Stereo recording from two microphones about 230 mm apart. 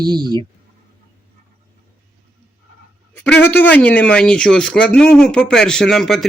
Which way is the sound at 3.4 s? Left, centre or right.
Centre.